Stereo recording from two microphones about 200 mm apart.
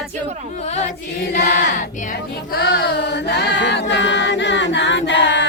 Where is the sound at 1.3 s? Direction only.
40° left (ahead or behind).